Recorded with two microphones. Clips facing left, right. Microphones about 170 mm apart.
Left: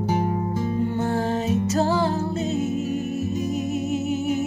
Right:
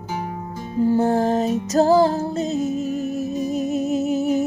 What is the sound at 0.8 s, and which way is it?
Music, 35° right (ahead or behind).